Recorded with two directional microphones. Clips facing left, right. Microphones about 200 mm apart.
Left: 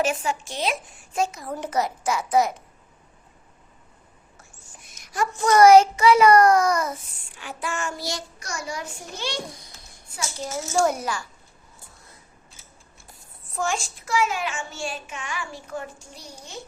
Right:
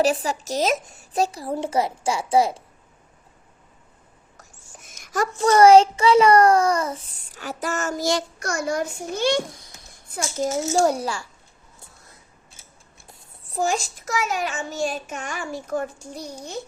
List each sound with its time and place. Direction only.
0.0 s speech: 35° right (ahead or behind)
4.4 s a child's voice: 45° right (ahead or behind)
8.1 s a child's voice: 55° right (ahead or behind); by 11.3 s 30° right (ahead or behind)
13.1 s a child's voice: 35° right (ahead or behind)